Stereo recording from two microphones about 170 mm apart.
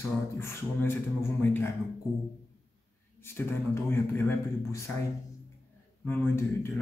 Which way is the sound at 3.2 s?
15° left (ahead or behind).